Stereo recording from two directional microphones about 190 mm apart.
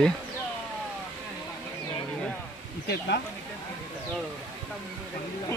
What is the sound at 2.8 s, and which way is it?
Speech, 55° left (ahead or behind).